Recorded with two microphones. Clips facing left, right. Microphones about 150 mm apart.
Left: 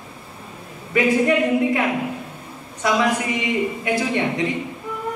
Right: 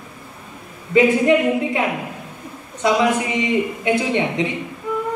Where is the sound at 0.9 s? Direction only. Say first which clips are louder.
Right 4 dB; 20° right (ahead or behind).